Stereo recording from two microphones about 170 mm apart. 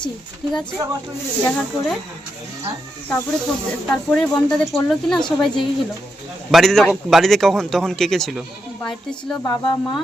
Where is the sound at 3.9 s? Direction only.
5° left (ahead or behind).